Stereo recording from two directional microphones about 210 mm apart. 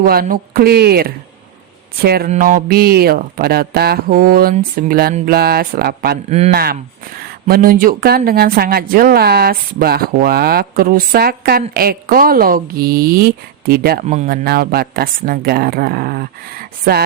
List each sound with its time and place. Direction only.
0.0 s speech: 45° right (ahead or behind)